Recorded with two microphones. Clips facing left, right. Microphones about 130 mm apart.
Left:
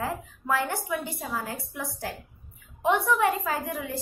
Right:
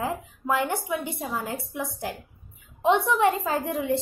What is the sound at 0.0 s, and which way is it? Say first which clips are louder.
A woman's voice: right 2 dB; 20° right (ahead or behind).